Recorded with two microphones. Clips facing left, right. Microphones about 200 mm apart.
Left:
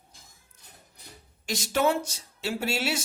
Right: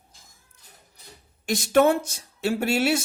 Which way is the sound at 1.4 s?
55° right (ahead or behind).